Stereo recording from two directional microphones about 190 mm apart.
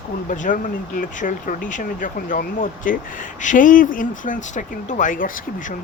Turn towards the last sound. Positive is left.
turn(degrees=45)  # may be behind; listen again after turning